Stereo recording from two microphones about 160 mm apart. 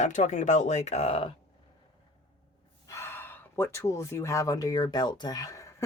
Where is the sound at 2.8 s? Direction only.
15° left (ahead or behind).